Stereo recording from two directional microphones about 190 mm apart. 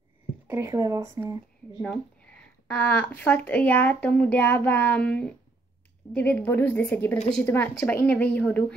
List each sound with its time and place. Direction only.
0.5 s speech: 15° right (ahead or behind)
1.8 s speech: 5° left (ahead or behind)